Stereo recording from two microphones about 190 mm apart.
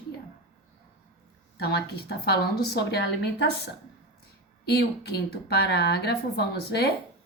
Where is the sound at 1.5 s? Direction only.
55° left (ahead or behind).